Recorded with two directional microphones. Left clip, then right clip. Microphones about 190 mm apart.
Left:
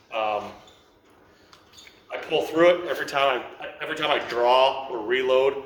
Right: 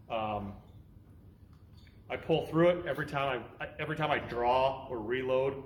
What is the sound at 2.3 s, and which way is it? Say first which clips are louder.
Speech: left 8 dB; centre (ahead or behind).